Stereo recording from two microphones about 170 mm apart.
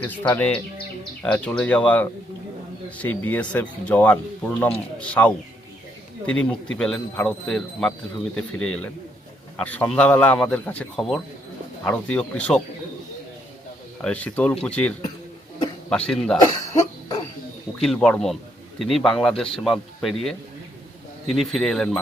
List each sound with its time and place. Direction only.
0.0 s speech: 10° left (ahead or behind)
14.0 s speech: 10° left (ahead or behind)
15.9 s speech: 5° left (ahead or behind)
16.4 s cough: 25° left (ahead or behind)
17.8 s speech: 5° left (ahead or behind)